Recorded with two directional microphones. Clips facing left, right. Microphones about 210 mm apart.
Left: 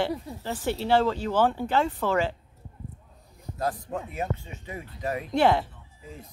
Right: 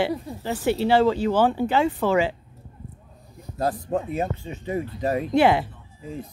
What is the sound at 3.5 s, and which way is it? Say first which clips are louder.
Speech: right 6 dB; 30° right (ahead or behind).